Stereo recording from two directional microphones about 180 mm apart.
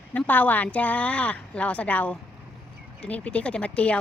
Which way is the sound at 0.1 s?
10° left (ahead or behind).